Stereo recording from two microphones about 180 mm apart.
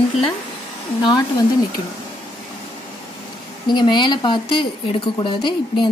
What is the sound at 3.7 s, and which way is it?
A woman's voice, 25° left (ahead or behind).